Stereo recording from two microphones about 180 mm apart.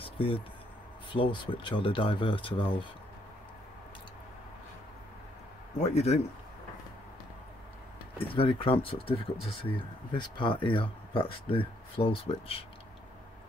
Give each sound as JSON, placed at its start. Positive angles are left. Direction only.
{"t": 0.0, "sound": "a sound", "side_deg": 30}
{"t": 1.3, "sound": "speech", "side_deg": 25}
{"t": 5.8, "sound": "a man's voice", "side_deg": 35}
{"t": 8.2, "sound": "speech", "side_deg": 30}